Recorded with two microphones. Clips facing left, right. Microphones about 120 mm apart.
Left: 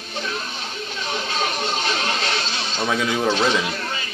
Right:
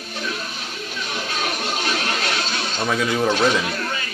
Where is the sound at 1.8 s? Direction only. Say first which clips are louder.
Even; 30° left (ahead or behind).